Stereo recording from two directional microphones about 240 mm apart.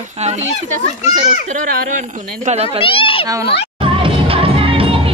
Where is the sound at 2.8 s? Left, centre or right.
Left.